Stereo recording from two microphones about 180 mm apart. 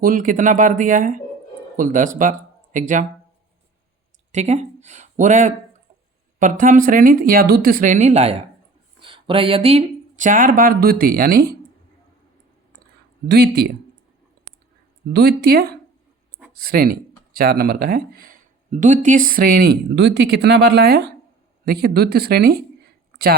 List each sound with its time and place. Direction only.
0.0 s speech: 50° right (ahead or behind)
4.3 s speech: 40° right (ahead or behind)
13.2 s speech: 60° right (ahead or behind)
15.1 s speech: 60° right (ahead or behind)